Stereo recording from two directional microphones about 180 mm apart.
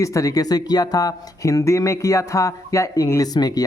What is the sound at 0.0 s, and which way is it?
Speech, 20° left (ahead or behind).